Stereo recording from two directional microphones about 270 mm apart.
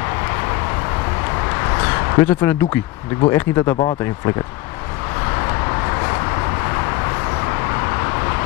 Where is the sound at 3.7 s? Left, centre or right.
Centre.